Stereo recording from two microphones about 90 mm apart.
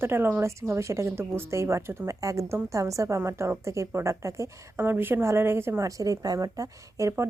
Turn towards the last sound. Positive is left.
turn(degrees=-40)  # may be behind; listen again after turning